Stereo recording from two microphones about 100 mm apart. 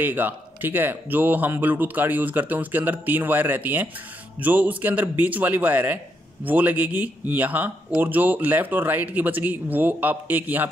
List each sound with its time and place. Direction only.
0.0 s speech: 20° right (ahead or behind)